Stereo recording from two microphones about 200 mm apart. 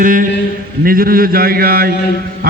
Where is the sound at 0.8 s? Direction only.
45° right (ahead or behind).